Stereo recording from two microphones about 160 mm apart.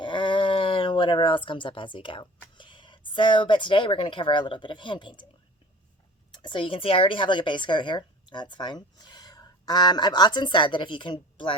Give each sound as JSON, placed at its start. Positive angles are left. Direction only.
{"t": 0.0, "sound": "a sound", "side_deg": 30}
{"t": 2.6, "sound": "speech", "side_deg": 30}
{"t": 6.3, "sound": "speech", "side_deg": 30}